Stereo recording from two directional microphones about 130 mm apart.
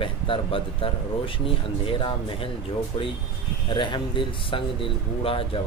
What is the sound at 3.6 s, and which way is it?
Speech, 40° left (ahead or behind).